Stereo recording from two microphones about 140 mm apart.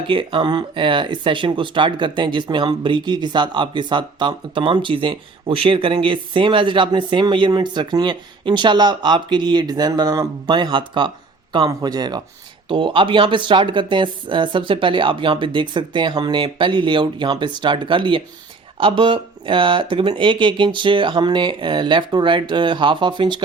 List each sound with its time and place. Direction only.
0.1 s speech: 35° right (ahead or behind)